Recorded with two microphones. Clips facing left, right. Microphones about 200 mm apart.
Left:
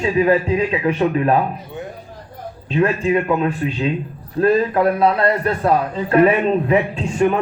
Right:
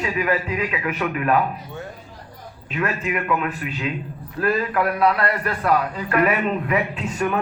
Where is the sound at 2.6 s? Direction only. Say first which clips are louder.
Left 8 dB; 30° left (ahead or behind).